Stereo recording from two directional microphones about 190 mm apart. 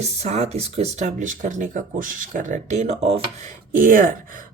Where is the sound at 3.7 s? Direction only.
45° right (ahead or behind).